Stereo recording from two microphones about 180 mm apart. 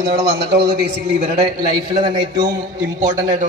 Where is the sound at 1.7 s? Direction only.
20° right (ahead or behind).